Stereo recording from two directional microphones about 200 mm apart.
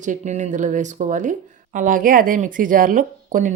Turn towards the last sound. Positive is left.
turn(degrees=-40)  # may be behind; listen again after turning